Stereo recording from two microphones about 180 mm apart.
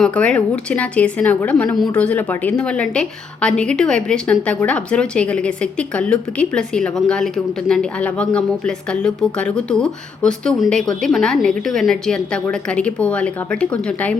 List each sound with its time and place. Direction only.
0.0 s a woman's voice: 5° left (ahead or behind)